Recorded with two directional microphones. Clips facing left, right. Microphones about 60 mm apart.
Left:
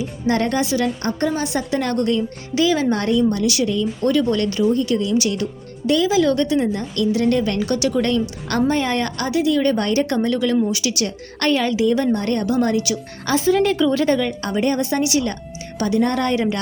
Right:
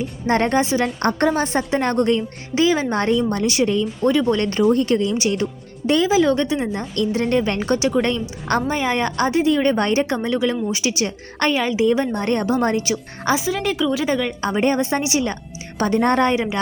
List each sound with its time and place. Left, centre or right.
0.3 s speech: right
0.9 s a woman's voice: right
4.0 s speech: centre
4.4 s a woman's voice: right
5.1 s speech: right
8.6 s speech: centre
13.3 s speech: centre
14.5 s speech: right
15.8 s a woman's voice: right
16.2 s speech: right